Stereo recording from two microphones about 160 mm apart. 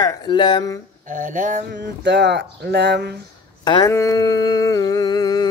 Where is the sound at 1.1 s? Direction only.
55° right (ahead or behind).